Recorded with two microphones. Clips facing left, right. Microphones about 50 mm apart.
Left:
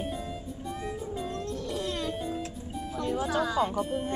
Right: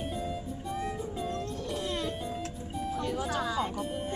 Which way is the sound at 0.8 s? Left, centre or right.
Centre.